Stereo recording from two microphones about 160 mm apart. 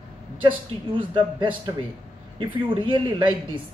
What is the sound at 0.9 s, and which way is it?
Speech, 30° right (ahead or behind).